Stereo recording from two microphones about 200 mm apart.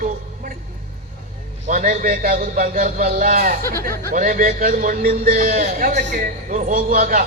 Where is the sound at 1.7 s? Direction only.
45° right (ahead or behind).